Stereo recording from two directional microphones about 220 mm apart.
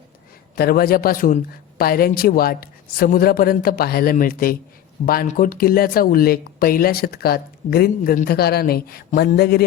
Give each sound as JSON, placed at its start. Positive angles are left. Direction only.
{"t": 0.5, "sound": "speech", "side_deg": 45}